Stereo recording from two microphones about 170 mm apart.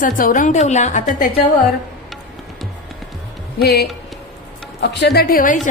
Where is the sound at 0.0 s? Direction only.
50° left (ahead or behind).